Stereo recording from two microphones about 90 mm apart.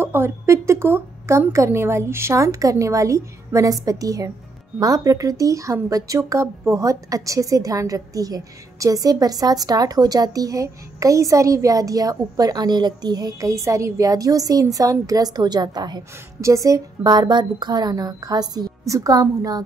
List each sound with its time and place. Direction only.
0.0 s a woman's voice: 25° right (ahead or behind); by 16.0 s 50° right (ahead or behind)
16.3 s a woman's voice: 35° right (ahead or behind)